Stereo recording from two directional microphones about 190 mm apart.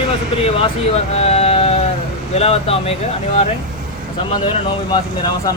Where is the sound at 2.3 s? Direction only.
30° left (ahead or behind).